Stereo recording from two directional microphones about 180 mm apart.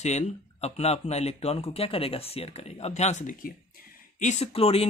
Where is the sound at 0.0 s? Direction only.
40° left (ahead or behind).